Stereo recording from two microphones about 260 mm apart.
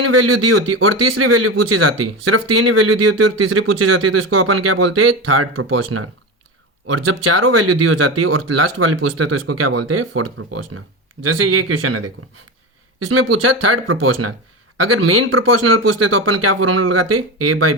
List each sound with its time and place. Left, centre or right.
0.0 s speech: right
13.3 s speech: right
15.4 s speech: right